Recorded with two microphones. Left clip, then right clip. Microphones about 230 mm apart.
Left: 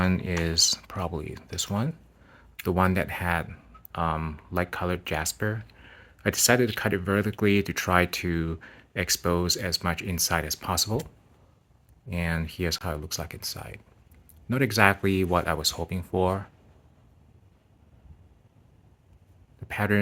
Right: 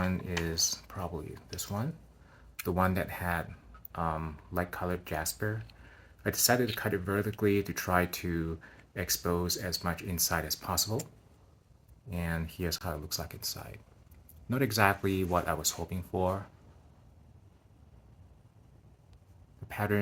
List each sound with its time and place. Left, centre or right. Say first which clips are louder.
0.0 s speech: left 6 dB; left
12.1 s speech: left 7 dB; left
19.6 s speech: left 6 dB; left